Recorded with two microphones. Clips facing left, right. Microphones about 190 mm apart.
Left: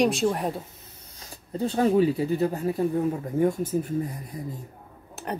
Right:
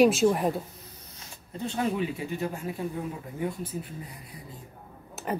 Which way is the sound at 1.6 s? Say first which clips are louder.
Left 8 dB; 35° left (ahead or behind).